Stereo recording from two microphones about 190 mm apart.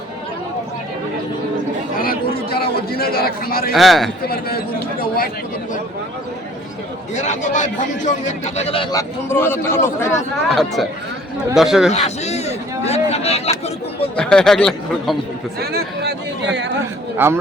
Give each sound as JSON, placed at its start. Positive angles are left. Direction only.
{"t": 2.0, "sound": "chatter", "side_deg": 50}
{"t": 3.7, "sound": "speech", "side_deg": 0}
{"t": 4.3, "sound": "speech", "side_deg": 55}
{"t": 7.2, "sound": "a man's voice", "side_deg": 40}
{"t": 10.5, "sound": "speech", "side_deg": 0}
{"t": 11.9, "sound": "a man's voice", "side_deg": 35}
{"t": 14.2, "sound": "speech", "side_deg": 5}
{"t": 15.6, "sound": "speech", "side_deg": -55}